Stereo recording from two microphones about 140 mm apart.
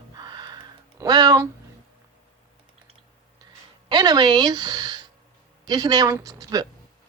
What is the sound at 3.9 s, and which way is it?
A woman's voice, 30° right (ahead or behind).